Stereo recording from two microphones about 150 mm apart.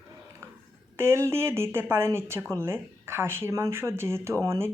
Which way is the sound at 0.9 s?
15° right (ahead or behind).